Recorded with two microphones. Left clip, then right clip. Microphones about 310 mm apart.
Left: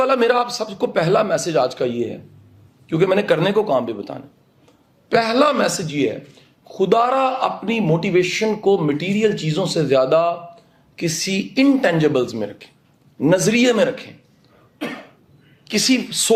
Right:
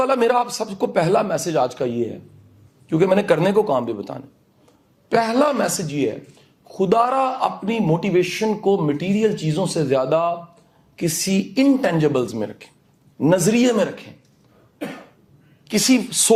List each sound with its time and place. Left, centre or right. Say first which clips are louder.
0.0 s a man's voice: left 1 dB; right
15.6 s a woman's voice: even; right